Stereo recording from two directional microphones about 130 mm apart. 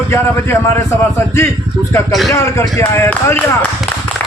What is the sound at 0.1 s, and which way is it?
A man's voice, 20° left (ahead or behind).